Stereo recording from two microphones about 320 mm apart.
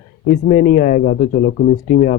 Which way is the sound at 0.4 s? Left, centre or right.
Left.